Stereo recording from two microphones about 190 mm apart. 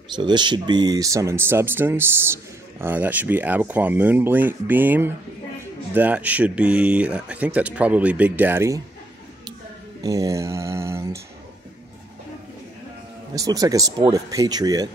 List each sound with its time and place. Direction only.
0.1 s speech: 25° right (ahead or behind)
10.0 s speech: 15° right (ahead or behind)
13.3 s speech: 20° right (ahead or behind)